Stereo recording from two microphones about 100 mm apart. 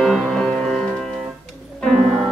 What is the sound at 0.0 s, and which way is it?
Music, 5° left (ahead or behind).